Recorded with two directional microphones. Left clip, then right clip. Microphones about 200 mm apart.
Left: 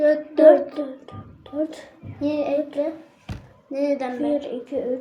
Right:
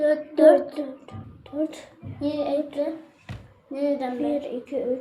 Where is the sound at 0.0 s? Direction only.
25° left (ahead or behind).